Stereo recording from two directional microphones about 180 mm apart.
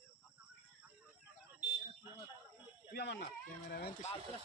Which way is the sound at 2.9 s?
70° left (ahead or behind).